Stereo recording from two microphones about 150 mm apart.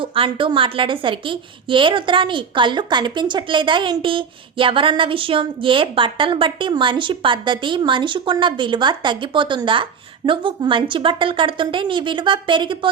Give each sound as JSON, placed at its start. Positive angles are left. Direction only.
{"t": 0.0, "sound": "a woman's voice", "side_deg": -35}